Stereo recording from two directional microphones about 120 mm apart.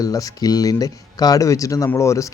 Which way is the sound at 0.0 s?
30° left (ahead or behind).